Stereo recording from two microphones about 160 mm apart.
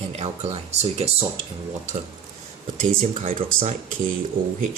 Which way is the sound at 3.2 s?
55° right (ahead or behind).